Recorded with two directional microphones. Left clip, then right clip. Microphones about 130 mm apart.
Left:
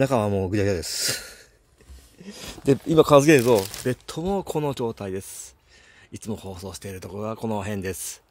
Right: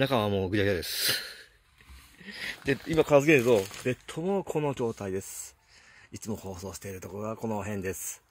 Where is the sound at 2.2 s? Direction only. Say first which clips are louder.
Right 2 dB; 50° left (ahead or behind).